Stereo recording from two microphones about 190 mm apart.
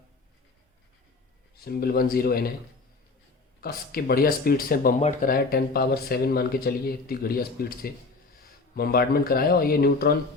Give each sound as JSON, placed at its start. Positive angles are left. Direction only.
{"t": 1.5, "sound": "speech", "side_deg": 55}
{"t": 3.6, "sound": "speech", "side_deg": 50}
{"t": 4.9, "sound": "speech", "side_deg": 35}
{"t": 5.3, "sound": "speech", "side_deg": 55}